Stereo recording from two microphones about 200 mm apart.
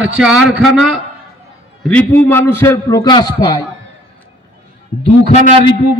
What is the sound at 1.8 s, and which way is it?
A man's voice, 5° left (ahead or behind).